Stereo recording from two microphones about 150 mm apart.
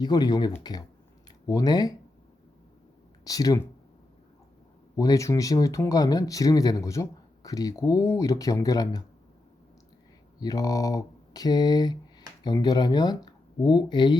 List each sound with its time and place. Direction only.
0.0 s speech: 25° left (ahead or behind)
3.2 s speech: 25° left (ahead or behind)
4.9 s speech: 20° left (ahead or behind)
10.4 s speech: 25° left (ahead or behind)